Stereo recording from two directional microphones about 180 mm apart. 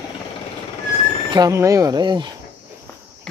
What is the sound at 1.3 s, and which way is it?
Speech, 20° right (ahead or behind).